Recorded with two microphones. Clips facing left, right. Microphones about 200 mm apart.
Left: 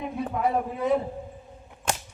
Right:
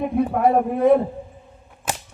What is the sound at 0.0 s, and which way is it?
A man's voice, 55° right (ahead or behind).